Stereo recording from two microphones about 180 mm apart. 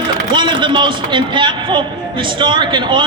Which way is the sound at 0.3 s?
25° right (ahead or behind).